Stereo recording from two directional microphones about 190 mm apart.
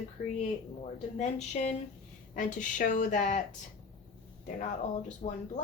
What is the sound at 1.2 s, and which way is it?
A woman's voice, 35° left (ahead or behind).